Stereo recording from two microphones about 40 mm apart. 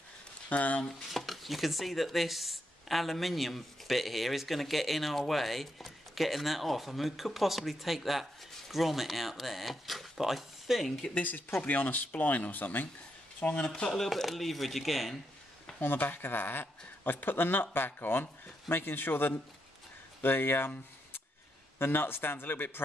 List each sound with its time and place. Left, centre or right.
0.5 s speech: left
1.1 s speech: centre
11.1 s speech: left
13.7 s speech: centre
15.8 s speech: left
21.7 s speech: left